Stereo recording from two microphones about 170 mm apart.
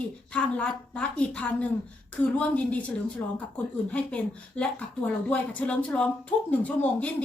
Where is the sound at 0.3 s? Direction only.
5° left (ahead or behind).